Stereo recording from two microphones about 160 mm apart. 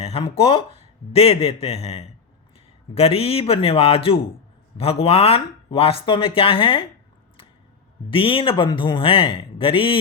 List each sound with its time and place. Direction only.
0.0 s a sound: 35° left (ahead or behind)
0.3 s speech: 35° left (ahead or behind)
8.1 s speech: 35° left (ahead or behind)